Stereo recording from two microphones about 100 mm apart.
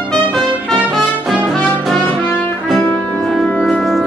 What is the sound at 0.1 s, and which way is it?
Trumpet, 5° left (ahead or behind).